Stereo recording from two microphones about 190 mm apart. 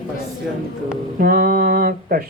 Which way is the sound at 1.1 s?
50° right (ahead or behind).